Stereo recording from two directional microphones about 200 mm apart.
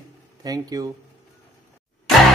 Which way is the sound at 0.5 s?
20° right (ahead or behind).